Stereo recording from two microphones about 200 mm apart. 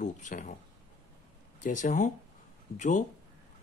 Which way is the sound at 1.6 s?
40° left (ahead or behind).